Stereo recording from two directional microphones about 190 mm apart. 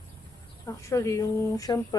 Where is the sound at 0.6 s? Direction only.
15° left (ahead or behind).